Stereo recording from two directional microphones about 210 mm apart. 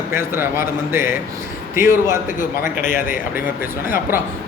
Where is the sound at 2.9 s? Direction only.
40° left (ahead or behind).